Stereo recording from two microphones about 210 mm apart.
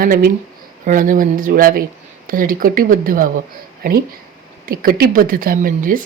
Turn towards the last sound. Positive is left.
turn(degrees=-40)  # may be behind; listen again after turning